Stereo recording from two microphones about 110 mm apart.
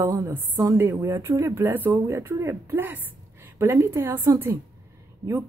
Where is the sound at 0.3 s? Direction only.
20° right (ahead or behind).